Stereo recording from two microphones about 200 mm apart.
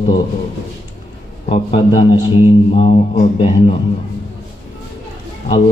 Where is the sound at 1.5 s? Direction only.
30° left (ahead or behind).